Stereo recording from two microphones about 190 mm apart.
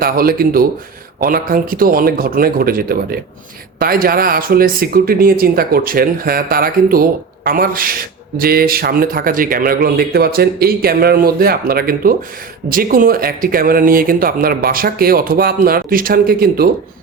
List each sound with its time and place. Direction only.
0.0 s speech: 50° right (ahead or behind)